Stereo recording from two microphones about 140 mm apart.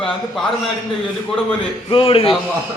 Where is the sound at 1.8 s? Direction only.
40° left (ahead or behind).